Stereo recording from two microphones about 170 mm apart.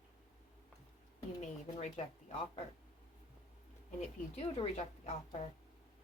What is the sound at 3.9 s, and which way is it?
A woman's voice, 35° left (ahead or behind).